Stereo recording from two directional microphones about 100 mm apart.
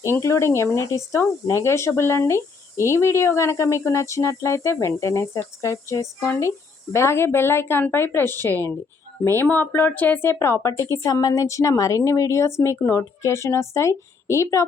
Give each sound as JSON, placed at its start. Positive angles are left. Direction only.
{"t": 0.0, "sound": "speech", "side_deg": 30}